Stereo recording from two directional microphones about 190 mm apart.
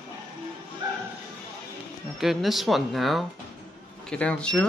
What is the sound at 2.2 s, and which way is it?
Speech, centre (ahead or behind).